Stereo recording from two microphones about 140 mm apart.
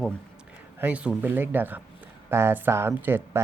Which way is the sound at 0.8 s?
10° right (ahead or behind).